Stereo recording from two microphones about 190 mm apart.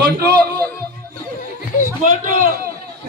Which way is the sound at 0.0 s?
55° right (ahead or behind).